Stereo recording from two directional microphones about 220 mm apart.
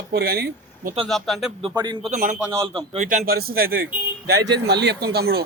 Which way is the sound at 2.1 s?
35° right (ahead or behind).